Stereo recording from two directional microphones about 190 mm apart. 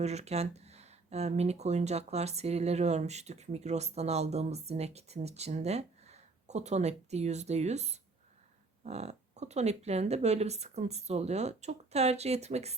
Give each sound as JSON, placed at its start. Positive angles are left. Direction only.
{"t": 0.0, "sound": "speech", "side_deg": -35}